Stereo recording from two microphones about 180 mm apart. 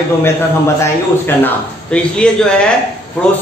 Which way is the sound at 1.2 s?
10° left (ahead or behind).